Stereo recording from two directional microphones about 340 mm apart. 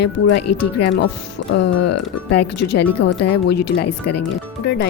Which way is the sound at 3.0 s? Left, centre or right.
Left.